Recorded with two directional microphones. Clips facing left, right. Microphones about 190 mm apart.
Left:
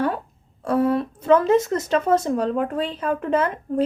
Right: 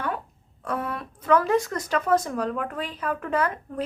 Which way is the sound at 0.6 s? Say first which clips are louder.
Left 10 dB; 30° left (ahead or behind).